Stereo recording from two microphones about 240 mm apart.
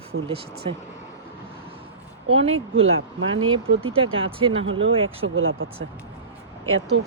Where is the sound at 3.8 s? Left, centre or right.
Right.